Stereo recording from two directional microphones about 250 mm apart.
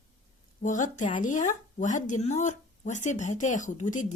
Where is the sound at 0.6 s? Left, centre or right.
Left.